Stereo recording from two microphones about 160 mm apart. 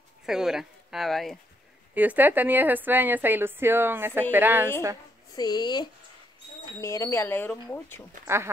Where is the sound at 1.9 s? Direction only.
10° right (ahead or behind).